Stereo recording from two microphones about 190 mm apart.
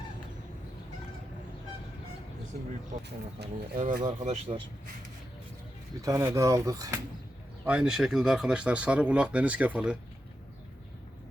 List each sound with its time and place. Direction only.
3.3 s speech: 60° right (ahead or behind)
4.2 s speech: 35° right (ahead or behind)
6.0 s speech: 15° right (ahead or behind)
7.6 s speech: 5° right (ahead or behind)